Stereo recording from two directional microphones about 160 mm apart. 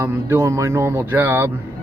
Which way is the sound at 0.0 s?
15° right (ahead or behind).